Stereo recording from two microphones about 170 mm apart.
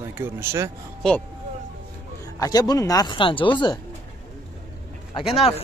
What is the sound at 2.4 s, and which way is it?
Speech, 20° left (ahead or behind).